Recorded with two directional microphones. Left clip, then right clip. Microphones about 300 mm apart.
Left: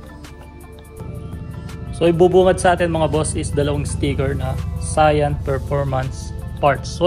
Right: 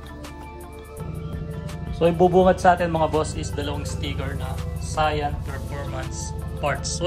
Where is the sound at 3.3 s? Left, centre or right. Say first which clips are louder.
Left 9 dB; centre.